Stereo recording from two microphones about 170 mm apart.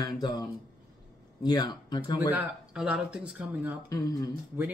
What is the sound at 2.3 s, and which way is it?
Speech, 5° right (ahead or behind).